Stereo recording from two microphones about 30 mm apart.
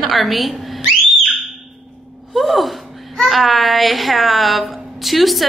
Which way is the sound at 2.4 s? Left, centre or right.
Centre.